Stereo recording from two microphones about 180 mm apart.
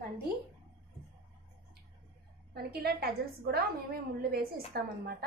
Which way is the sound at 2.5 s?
60° right (ahead or behind).